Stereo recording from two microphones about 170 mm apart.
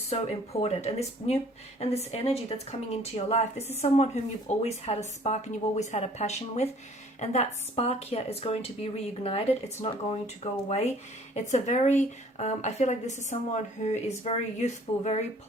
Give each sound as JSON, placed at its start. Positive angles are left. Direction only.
{"t": 0.1, "sound": "a woman's voice", "side_deg": 40}